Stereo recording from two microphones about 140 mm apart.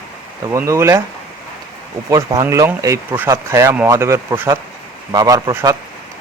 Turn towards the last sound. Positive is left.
turn(degrees=-20)  # may be behind; listen again after turning